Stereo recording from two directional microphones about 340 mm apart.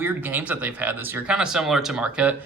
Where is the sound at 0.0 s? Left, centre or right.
Centre.